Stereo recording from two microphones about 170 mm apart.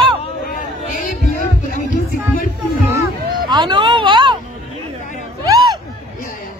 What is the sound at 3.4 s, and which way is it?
Music, 25° right (ahead or behind).